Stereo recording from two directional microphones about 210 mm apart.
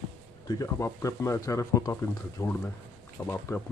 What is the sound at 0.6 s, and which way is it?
Speech, 15° left (ahead or behind).